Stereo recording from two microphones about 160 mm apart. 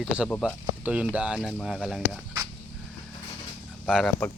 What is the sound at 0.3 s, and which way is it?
Speech, 5° left (ahead or behind).